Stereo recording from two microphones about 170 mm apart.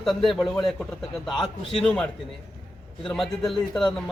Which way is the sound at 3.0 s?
Centre (ahead or behind).